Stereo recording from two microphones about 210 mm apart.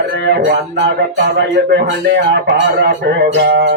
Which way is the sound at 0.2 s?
50° right (ahead or behind).